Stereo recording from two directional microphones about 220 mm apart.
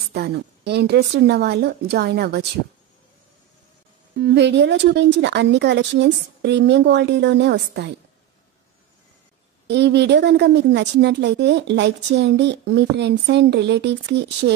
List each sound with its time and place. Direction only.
0.1 s a woman's voice: 50° right (ahead or behind)
4.2 s a woman's voice: 50° right (ahead or behind)
9.7 s a woman's voice: 50° right (ahead or behind)